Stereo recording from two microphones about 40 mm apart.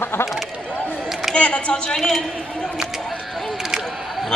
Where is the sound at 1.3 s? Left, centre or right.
Left.